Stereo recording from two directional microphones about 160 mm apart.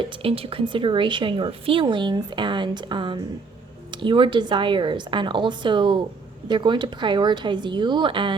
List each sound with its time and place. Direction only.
0.0 s speech: 35° right (ahead or behind)